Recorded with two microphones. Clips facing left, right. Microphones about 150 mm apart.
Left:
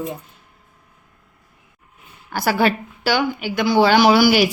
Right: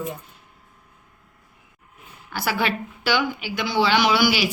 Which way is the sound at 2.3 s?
40° left (ahead or behind).